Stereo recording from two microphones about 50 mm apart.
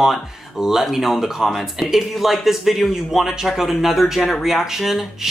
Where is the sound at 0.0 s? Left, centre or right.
Centre.